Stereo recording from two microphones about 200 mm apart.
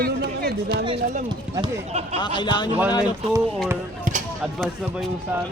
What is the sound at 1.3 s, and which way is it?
Speech, 25° right (ahead or behind).